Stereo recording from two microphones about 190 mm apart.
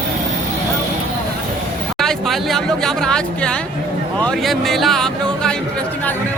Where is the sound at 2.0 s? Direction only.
Centre (ahead or behind).